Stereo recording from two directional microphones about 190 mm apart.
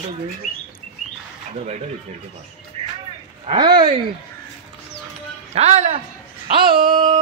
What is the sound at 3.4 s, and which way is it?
Speech, 25° right (ahead or behind).